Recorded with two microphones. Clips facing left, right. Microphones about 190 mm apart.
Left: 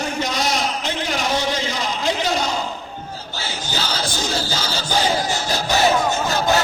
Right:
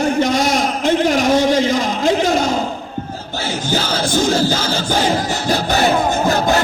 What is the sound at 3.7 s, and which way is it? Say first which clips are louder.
Music: right 8 dB; 50° right (ahead or behind).